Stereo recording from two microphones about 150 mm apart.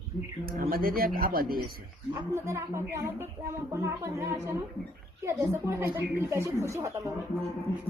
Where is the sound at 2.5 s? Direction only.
20° right (ahead or behind).